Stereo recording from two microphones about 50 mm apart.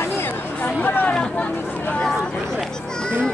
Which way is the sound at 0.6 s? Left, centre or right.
Left.